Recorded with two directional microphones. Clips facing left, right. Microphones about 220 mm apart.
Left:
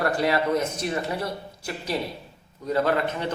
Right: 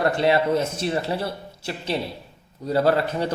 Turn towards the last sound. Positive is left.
turn(degrees=-35)  # may be behind; listen again after turning